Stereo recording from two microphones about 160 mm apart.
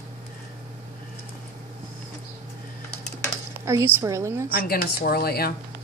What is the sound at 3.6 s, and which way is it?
Speech, 15° right (ahead or behind).